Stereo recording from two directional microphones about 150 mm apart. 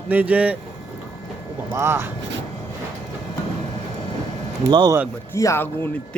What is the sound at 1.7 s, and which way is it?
Speech, 15° right (ahead or behind).